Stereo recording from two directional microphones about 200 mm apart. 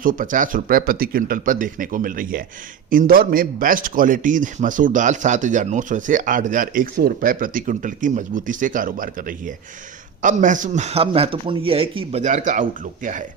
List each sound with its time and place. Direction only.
0.0 s a man's voice: 40° right (ahead or behind)